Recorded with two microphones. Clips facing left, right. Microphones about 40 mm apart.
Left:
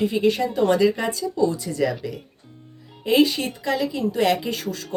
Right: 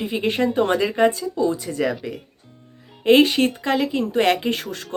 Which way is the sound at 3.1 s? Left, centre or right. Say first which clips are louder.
Right 4 dB; right.